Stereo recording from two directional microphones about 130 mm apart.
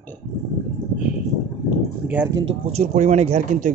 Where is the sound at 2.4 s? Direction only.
60° right (ahead or behind).